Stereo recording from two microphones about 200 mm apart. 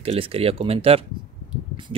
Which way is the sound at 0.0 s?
30° right (ahead or behind).